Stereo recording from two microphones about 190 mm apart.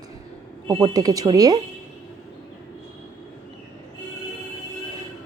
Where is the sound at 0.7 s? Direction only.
20° right (ahead or behind).